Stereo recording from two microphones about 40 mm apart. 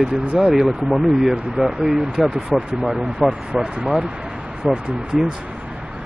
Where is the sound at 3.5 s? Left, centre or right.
Centre.